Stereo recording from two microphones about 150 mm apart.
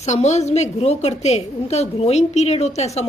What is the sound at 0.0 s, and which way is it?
A woman's voice, 50° left (ahead or behind).